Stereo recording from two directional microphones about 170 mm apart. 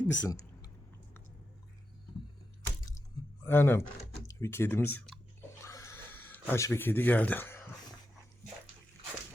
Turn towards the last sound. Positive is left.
turn(degrees=10)  # may be behind; listen again after turning